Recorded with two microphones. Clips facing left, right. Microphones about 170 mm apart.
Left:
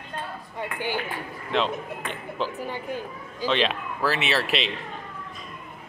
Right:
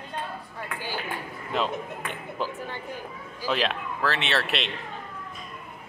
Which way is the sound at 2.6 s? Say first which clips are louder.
Left 4 dB; 15° left (ahead or behind).